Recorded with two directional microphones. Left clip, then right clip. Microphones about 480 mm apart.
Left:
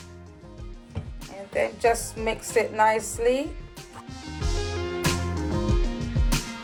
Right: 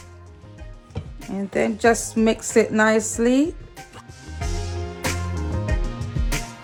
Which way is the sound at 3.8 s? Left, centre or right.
Centre.